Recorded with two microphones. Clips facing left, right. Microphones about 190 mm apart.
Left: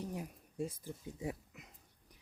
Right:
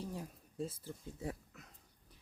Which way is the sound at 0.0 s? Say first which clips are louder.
Left 2 dB; 15° left (ahead or behind).